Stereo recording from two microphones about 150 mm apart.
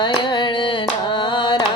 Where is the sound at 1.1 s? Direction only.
30° left (ahead or behind).